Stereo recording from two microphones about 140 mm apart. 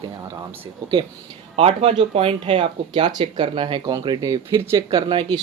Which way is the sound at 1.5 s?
45° right (ahead or behind).